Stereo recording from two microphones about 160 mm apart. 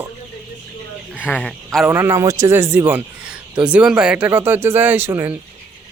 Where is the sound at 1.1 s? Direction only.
10° left (ahead or behind).